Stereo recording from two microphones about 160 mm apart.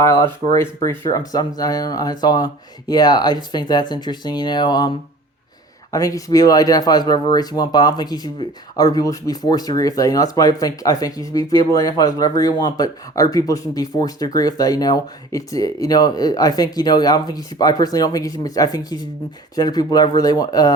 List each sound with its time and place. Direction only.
0.0 s speech: 20° left (ahead or behind)
5.9 s speech: 20° left (ahead or behind)